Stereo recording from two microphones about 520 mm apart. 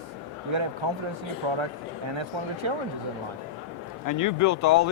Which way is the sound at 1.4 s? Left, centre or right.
Right.